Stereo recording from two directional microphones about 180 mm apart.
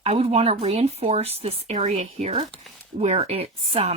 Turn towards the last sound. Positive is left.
turn(degrees=-35)  # may be behind; listen again after turning